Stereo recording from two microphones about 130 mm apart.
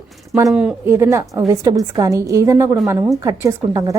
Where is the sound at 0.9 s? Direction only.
20° right (ahead or behind).